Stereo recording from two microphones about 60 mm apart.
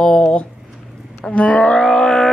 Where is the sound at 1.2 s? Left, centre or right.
Left.